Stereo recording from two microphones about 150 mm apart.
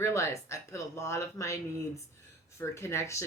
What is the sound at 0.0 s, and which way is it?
Speech, 20° left (ahead or behind).